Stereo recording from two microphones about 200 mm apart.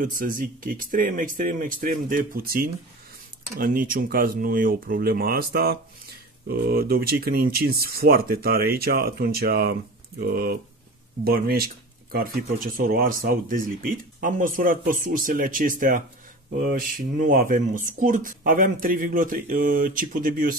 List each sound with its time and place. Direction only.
0.0 s speech: 45° right (ahead or behind)